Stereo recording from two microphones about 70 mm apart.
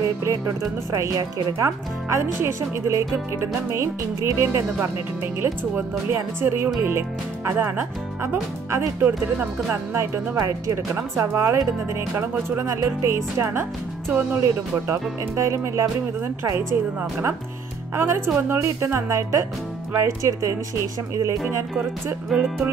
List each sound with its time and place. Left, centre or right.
0.2 s speech: right
9.0 s speech: right
10.3 s speech: right
17.9 s speech: right
22.3 s music: centre